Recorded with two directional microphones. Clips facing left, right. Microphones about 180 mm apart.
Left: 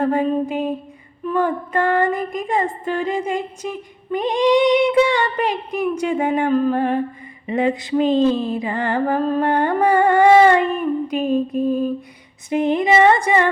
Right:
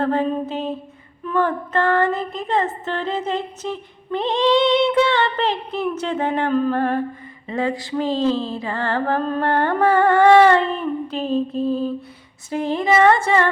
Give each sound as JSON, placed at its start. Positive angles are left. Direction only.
{"t": 0.0, "sound": "music", "side_deg": 10}